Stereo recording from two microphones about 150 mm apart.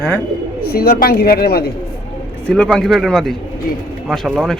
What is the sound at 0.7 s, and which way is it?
Speech, 90° left.